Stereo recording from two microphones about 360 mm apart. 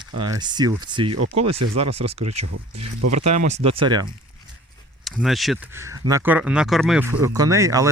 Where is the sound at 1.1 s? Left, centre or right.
Right.